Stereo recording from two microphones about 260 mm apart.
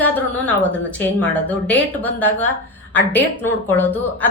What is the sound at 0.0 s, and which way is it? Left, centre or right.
A woman's voice, centre.